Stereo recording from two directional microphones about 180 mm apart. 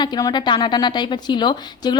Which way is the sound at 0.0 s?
25° left (ahead or behind).